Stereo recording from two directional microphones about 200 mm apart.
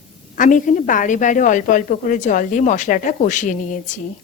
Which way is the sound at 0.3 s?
40° left (ahead or behind).